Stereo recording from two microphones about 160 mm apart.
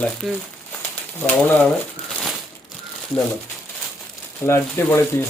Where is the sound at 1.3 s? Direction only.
10° left (ahead or behind).